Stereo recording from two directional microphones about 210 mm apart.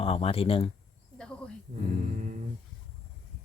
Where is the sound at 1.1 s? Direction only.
5° left (ahead or behind).